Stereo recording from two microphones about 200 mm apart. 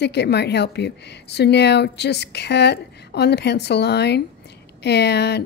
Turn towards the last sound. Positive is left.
turn(degrees=55)  # may be behind; listen again after turning